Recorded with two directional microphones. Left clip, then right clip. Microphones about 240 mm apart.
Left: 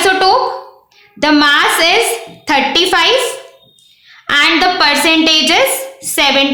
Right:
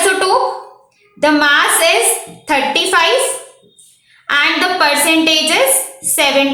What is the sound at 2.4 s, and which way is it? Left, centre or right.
Speech, left.